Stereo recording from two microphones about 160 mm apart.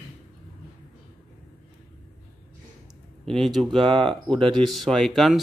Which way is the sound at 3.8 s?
30° right (ahead or behind).